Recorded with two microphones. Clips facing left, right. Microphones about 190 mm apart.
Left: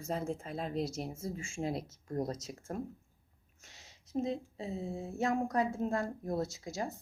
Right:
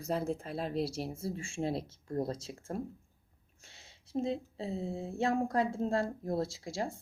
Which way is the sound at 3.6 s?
30° right (ahead or behind).